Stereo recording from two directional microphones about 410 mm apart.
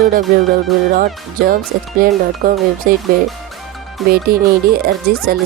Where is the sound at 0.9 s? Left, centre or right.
Right.